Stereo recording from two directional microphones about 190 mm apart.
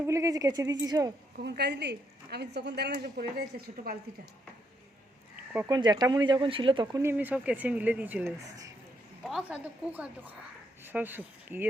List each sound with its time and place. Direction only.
0.1 s speech: 15° right (ahead or behind)
1.4 s a woman's voice: 60° right (ahead or behind)
5.5 s speech: 20° right (ahead or behind)
7.0 s speech: 10° right (ahead or behind)